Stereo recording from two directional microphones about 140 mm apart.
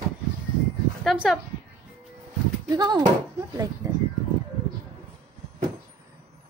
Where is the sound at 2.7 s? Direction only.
30° right (ahead or behind).